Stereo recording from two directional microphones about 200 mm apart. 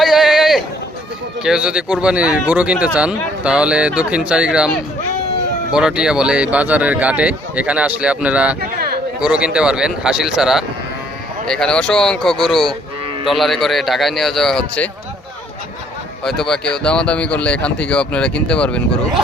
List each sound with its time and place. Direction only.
0.0 s a sound: centre (ahead or behind)
1.4 s speech: 5° right (ahead or behind)
5.7 s speech: 5° right (ahead or behind)
8.6 s speech: 50° right (ahead or behind)
9.2 s speech: 5° right (ahead or behind)
16.2 s speech: centre (ahead or behind)